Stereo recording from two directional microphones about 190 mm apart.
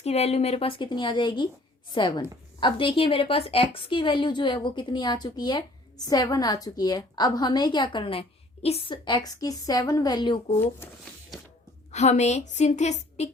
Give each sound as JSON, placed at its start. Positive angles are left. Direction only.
{"t": 0.0, "sound": "a woman's voice", "side_deg": 35}
{"t": 11.9, "sound": "a woman's voice", "side_deg": 35}